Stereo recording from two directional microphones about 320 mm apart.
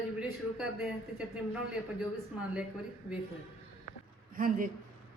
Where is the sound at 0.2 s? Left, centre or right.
Centre.